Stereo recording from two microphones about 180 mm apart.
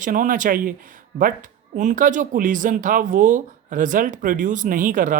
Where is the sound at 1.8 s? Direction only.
45° right (ahead or behind).